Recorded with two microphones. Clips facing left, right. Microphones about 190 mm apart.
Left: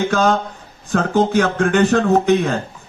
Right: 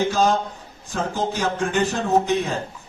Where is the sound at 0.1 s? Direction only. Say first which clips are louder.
Left 3 dB; 65° left (ahead or behind).